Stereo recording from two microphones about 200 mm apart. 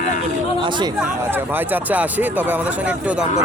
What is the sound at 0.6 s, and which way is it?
Speech, 25° right (ahead or behind).